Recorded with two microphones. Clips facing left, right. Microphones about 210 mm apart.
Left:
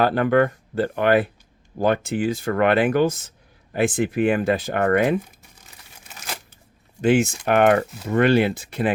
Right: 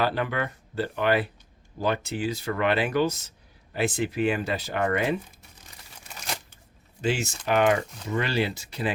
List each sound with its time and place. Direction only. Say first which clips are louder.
0.0 s speech: left 9 dB; 50° left (ahead or behind)
7.0 s speech: left 9 dB; 55° left (ahead or behind)